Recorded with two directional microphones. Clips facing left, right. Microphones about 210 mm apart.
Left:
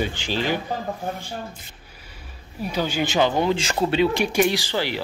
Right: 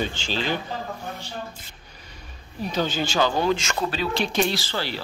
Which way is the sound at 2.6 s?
10° left (ahead or behind).